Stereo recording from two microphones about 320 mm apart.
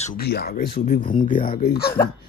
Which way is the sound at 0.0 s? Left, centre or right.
Left.